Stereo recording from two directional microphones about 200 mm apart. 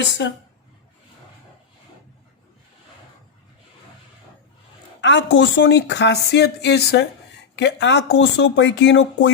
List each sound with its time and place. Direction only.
0.0 s speech: 65° left (ahead or behind)
4.9 s speech: 65° left (ahead or behind)